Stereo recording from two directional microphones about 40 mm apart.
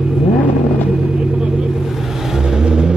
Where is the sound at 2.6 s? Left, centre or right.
Centre.